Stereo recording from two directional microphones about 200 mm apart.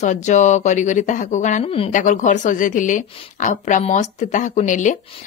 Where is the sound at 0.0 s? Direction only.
35° left (ahead or behind).